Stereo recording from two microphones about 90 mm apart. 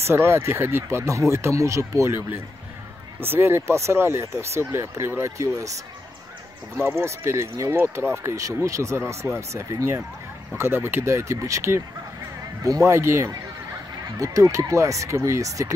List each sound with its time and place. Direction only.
0.0 s speech: 30° right (ahead or behind)
7.0 s speech: 30° right (ahead or behind)